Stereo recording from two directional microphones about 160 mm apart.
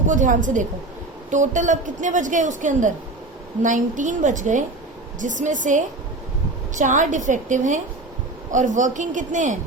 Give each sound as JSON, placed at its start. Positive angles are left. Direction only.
{"t": 0.1, "sound": "a woman's voice", "side_deg": -50}